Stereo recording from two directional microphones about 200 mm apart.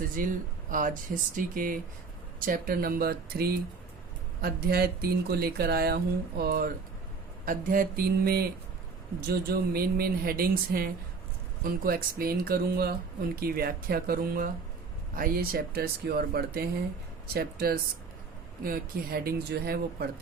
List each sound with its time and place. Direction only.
0.2 s speech: 45° right (ahead or behind)